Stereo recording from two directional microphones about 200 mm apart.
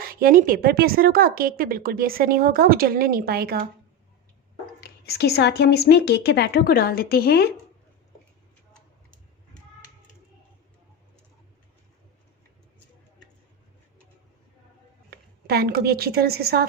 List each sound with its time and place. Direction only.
0.0 s a woman's voice: 45° right (ahead or behind)
4.8 s a woman's voice: 55° left (ahead or behind)
15.1 s a woman's voice: 50° right (ahead or behind)